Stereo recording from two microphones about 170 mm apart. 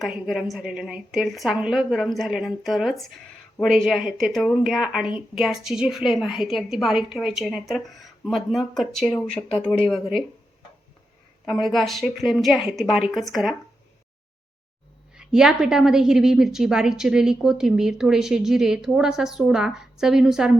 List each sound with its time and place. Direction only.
0.0 s a woman's voice: centre (ahead or behind)
11.4 s a woman's voice: centre (ahead or behind)
15.1 s a woman's voice: 5° right (ahead or behind)